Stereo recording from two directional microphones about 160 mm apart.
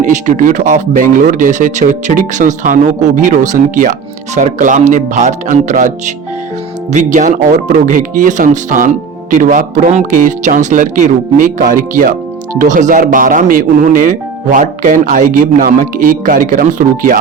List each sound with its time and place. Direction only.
0.0 s speech: 50° right (ahead or behind)